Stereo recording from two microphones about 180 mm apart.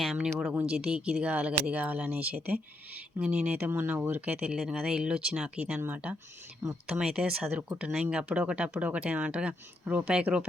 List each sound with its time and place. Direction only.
0.0 s speech: centre (ahead or behind); by 7.0 s 15° right (ahead or behind)
7.0 s speech: 5° right (ahead or behind)